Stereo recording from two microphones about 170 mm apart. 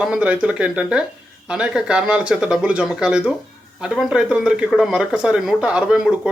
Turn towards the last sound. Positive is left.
turn(degrees=-5)  # may be behind; listen again after turning